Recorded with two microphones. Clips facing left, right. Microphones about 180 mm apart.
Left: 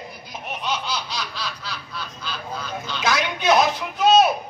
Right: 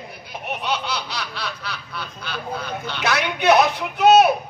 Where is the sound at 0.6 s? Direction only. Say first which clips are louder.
Right 1 dB; 65° right (ahead or behind).